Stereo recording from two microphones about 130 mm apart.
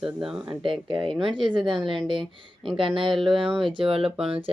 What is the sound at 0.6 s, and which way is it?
Speech, 40° right (ahead or behind).